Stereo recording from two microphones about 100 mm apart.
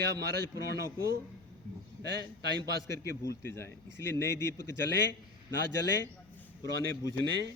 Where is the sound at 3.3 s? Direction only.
25° left (ahead or behind).